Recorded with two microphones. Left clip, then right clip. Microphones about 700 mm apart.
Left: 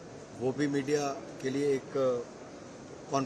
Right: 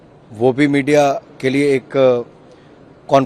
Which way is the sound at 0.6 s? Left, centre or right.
Right.